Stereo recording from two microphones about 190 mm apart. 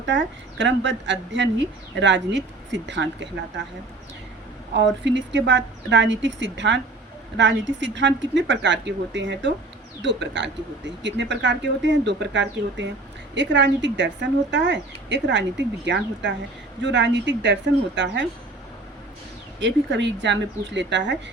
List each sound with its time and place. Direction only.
0.0 s speech: 70° right (ahead or behind)
5.0 s speech: 70° right (ahead or behind)
19.5 s speech: 70° right (ahead or behind)